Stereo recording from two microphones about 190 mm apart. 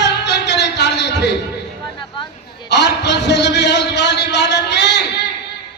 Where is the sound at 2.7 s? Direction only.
65° left (ahead or behind).